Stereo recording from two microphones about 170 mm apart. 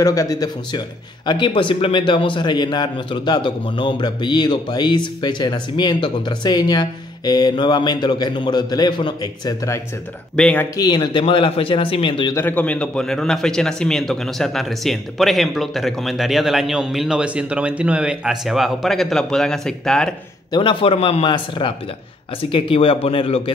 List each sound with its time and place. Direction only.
0.0 s speech: 20° left (ahead or behind)
10.3 s speech: 5° left (ahead or behind)
10.8 s speech: 25° left (ahead or behind)
12.4 s a man's voice: 10° left (ahead or behind)
20.5 s speech: 30° left (ahead or behind)